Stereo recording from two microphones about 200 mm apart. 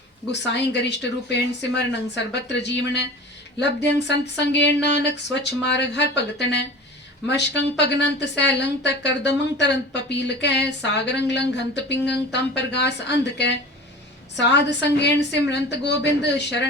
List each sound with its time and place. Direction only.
0.3 s a woman's voice: 60° left (ahead or behind)